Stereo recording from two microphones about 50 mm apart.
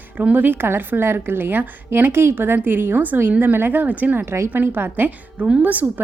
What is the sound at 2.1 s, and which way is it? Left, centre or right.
A woman's voice, right.